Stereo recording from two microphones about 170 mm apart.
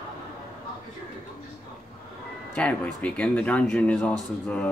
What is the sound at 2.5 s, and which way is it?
Speech, 5° left (ahead or behind).